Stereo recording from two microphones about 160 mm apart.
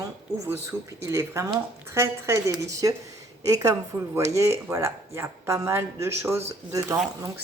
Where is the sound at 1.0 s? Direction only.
15° right (ahead or behind).